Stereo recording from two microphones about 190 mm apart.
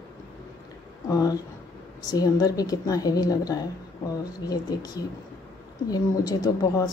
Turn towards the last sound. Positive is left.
turn(degrees=20)  # may be behind; listen again after turning